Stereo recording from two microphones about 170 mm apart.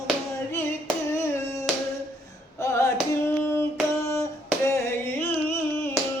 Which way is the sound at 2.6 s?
15° left (ahead or behind).